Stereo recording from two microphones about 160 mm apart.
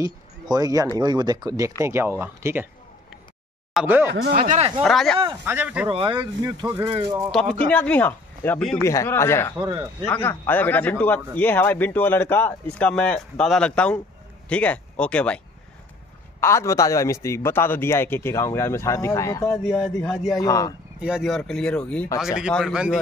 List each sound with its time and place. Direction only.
0.0 s speech: 20° right (ahead or behind)
3.7 s speech: 10° right (ahead or behind)
4.3 s speech: 55° right (ahead or behind)
4.8 s speech: 5° left (ahead or behind)
5.4 s speech: 10° right (ahead or behind)
5.9 s speech: 30° right (ahead or behind)
7.7 s a man's voice: 10° left (ahead or behind)
9.6 s speech: 20° right (ahead or behind)
10.0 s a man's voice: 15° left (ahead or behind)
19.5 s speech: 5° left (ahead or behind)
20.3 s speech: 20° left (ahead or behind)
21.0 s speech: 5° right (ahead or behind)